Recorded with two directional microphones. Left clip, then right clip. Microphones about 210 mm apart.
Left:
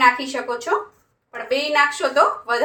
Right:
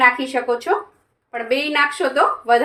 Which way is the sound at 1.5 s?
50° right (ahead or behind).